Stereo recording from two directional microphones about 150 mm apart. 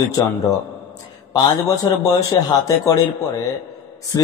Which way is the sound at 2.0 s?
20° left (ahead or behind).